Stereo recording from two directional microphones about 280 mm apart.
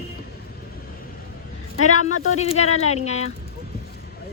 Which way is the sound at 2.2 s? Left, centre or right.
Left.